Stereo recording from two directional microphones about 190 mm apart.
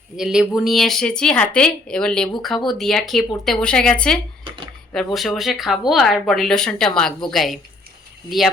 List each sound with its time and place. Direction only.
0.2 s speech: 5° right (ahead or behind)
4.4 s a sound: 25° right (ahead or behind)
5.1 s speech: centre (ahead or behind)